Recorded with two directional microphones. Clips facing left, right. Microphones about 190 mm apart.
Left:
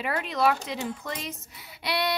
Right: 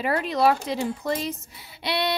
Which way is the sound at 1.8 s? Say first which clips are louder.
Right 2 dB; 25° right (ahead or behind).